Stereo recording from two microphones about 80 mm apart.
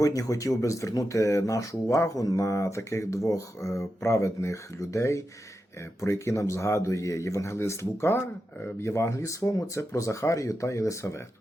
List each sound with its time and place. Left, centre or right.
0.0 s speech: left